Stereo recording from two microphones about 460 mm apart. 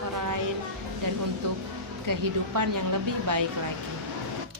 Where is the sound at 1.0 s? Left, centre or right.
Right.